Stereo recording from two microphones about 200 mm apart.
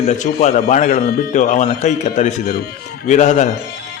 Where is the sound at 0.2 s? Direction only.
35° left (ahead or behind).